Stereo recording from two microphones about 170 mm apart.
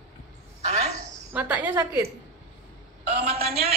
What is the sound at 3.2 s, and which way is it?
Speech, 35° right (ahead or behind).